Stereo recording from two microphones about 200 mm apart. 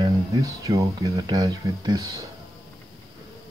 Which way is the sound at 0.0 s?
15° right (ahead or behind).